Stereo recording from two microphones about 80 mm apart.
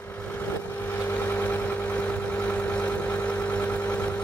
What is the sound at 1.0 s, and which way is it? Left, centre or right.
Vehicle, left.